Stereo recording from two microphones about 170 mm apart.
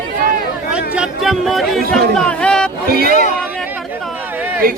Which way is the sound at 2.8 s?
65° right (ahead or behind).